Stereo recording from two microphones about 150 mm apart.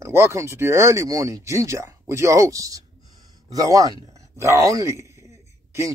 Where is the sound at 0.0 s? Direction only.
20° right (ahead or behind).